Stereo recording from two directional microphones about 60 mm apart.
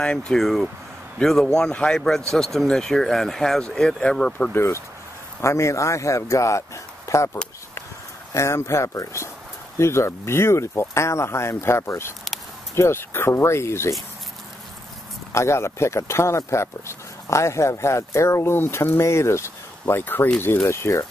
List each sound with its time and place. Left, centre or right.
0.0 s speech: centre
4.6 s a man's voice: left
8.3 s a man's voice: left
15.3 s speech: left
20.6 s speech: left